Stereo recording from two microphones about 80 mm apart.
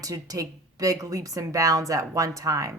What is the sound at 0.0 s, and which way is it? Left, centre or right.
A woman's voice, right.